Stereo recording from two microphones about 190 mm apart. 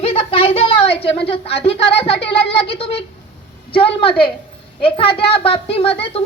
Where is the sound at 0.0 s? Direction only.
30° left (ahead or behind).